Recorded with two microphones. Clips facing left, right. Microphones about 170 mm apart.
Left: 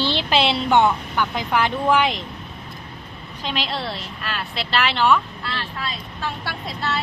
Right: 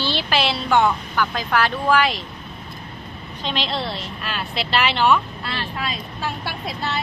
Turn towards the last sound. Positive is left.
turn(degrees=-15)  # may be behind; listen again after turning